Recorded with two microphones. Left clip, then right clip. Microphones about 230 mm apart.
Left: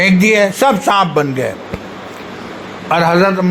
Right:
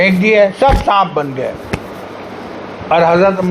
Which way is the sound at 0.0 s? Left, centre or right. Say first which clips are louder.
Right 1 dB; left.